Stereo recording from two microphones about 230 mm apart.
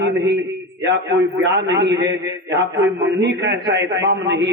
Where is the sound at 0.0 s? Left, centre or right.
Right.